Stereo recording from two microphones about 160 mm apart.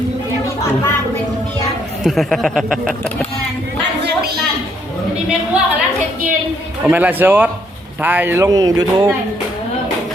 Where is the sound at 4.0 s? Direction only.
80° right.